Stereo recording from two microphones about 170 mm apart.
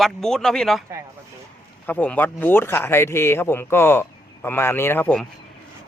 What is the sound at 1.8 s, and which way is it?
Speech, 10° left (ahead or behind).